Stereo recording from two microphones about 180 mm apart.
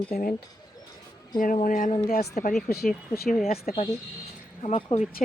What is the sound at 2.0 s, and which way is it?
Speech, 60° left (ahead or behind).